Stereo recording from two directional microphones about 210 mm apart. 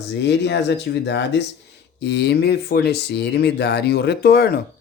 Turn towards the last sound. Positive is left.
turn(degrees=50)  # may be behind; listen again after turning